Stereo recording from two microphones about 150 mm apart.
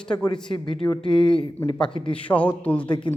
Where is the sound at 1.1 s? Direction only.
5° left (ahead or behind).